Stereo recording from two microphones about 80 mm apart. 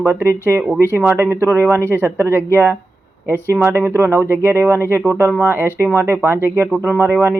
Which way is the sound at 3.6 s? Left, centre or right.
Right.